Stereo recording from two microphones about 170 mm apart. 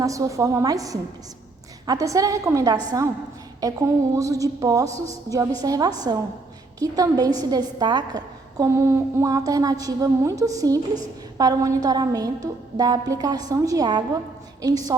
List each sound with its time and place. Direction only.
0.0 s a woman's voice: 20° right (ahead or behind)